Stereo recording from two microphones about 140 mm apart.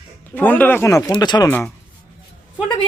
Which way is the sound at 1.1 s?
30° left (ahead or behind).